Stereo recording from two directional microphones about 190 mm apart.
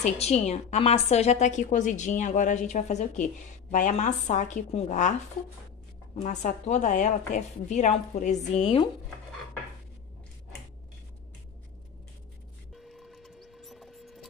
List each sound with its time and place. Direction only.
0.0 s a woman's voice: 35° left (ahead or behind)
6.2 s a woman's voice: 35° left (ahead or behind)
12.7 s printer: centre (ahead or behind)